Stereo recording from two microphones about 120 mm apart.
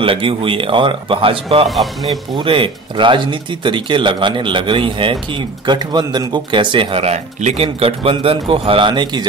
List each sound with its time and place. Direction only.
0.0 s speech: 50° right (ahead or behind)
1.7 s speech: centre (ahead or behind)
2.3 s speech: 45° right (ahead or behind)